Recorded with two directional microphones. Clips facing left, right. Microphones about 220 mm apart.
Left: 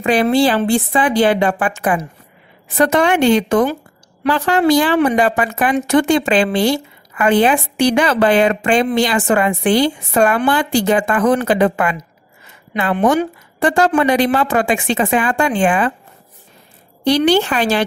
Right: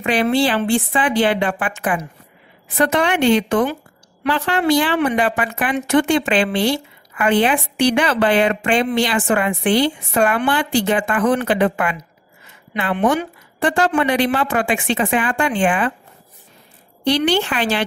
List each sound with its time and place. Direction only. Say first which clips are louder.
0.0 s a woman's voice: left 3 dB; 40° left (ahead or behind)
17.0 s a woman's voice: left 4 dB; 40° left (ahead or behind)